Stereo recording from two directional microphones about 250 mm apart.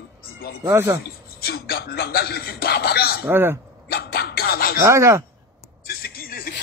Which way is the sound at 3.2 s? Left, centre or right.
Centre.